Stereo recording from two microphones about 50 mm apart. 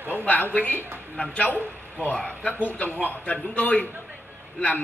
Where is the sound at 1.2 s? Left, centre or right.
Left.